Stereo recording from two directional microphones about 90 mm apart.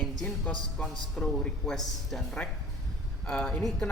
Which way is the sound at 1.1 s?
Centre (ahead or behind).